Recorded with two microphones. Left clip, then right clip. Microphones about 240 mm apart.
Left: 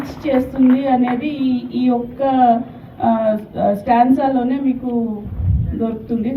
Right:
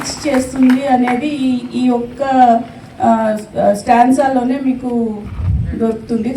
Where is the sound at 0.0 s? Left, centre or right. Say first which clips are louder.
Right 2 dB; right.